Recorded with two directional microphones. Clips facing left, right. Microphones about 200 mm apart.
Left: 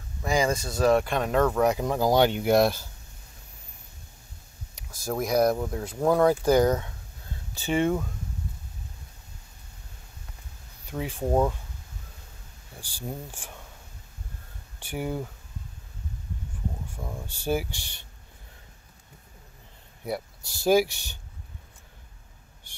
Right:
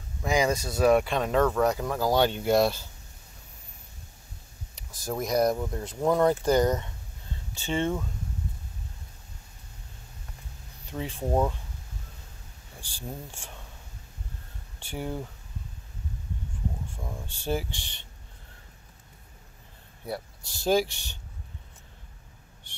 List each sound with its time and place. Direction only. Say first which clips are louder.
0.3 s speech: even; 10° right (ahead or behind)
1.6 s speech: left 2 dB; 10° left (ahead or behind)
5.0 s speech: left 2 dB; 5° left (ahead or behind)
10.9 s speech: left 2 dB; 10° left (ahead or behind)
12.9 s speech: left 3 dB; 15° left (ahead or behind)
14.8 s speech: left 3 dB; 15° left (ahead or behind)
17.0 s speech: left 2 dB; 5° left (ahead or behind)
20.6 s speech: left 3 dB; 10° left (ahead or behind)